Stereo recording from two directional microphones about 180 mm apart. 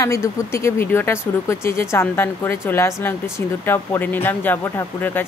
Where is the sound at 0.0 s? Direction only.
15° left (ahead or behind).